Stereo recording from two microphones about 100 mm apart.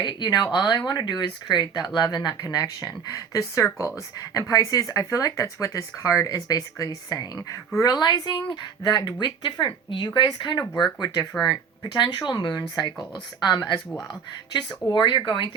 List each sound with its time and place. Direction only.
0.0 s speech: 50° left (ahead or behind)
14.9 s speech: 50° left (ahead or behind)